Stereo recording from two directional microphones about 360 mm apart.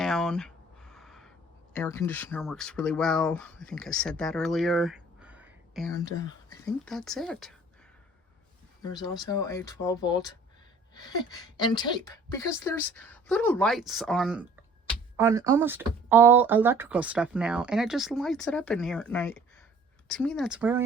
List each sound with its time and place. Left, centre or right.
0.0 s a sound: centre
1.7 s speech: centre
6.0 s speech: centre
8.8 s speech: centre